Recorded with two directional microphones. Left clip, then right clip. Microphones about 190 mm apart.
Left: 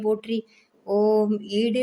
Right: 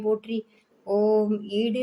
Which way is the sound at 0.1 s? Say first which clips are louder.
Even; 15° left (ahead or behind).